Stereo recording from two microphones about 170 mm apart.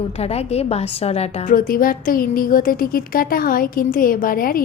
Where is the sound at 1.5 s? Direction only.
55° left (ahead or behind).